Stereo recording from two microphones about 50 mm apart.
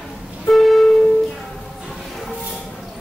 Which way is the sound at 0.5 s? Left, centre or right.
Centre.